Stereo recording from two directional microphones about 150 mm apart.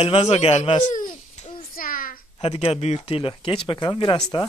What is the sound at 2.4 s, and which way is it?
Speech, 40° left (ahead or behind).